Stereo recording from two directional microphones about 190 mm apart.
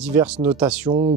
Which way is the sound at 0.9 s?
35° right (ahead or behind).